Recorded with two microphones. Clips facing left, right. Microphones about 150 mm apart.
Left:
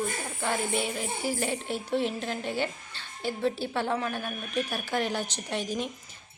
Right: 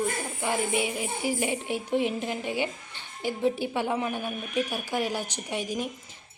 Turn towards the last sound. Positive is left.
turn(degrees=-10)  # may be behind; listen again after turning